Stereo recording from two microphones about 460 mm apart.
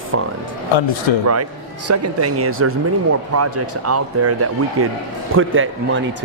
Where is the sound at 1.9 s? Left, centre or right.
Right.